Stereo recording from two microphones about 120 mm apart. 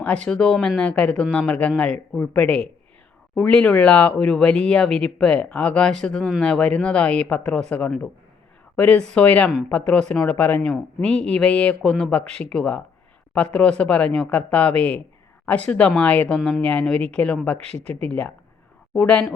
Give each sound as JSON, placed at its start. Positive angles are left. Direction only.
{"t": 0.0, "sound": "speech", "side_deg": 10}
{"t": 17.6, "sound": "speech", "side_deg": -60}
{"t": 17.8, "sound": "speech", "side_deg": 10}